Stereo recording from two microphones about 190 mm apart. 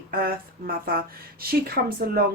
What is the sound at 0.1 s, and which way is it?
Speech, 50° right (ahead or behind).